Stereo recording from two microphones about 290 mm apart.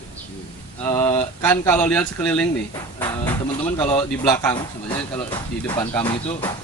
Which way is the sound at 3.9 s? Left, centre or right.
Centre.